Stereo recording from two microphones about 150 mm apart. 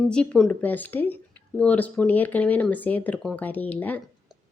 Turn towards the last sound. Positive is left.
turn(degrees=10)  # may be behind; listen again after turning